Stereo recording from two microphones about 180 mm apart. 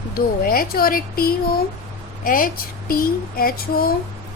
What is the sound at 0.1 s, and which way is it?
Speech, 55° left (ahead or behind).